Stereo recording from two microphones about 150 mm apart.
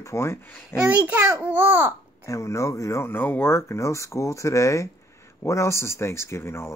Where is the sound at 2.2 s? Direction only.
20° left (ahead or behind).